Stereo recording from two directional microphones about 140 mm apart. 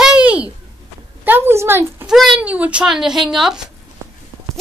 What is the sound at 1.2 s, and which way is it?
Speech, 15° right (ahead or behind).